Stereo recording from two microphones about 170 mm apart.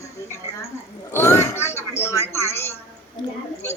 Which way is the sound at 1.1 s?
15° left (ahead or behind).